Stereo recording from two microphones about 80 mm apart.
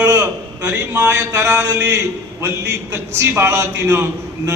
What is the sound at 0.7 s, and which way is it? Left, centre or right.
A man's voice, right.